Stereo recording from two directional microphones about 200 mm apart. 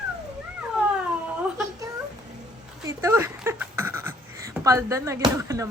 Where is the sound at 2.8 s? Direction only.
15° right (ahead or behind).